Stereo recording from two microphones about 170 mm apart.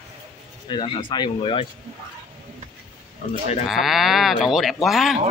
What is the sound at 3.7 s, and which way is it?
Speech, centre (ahead or behind).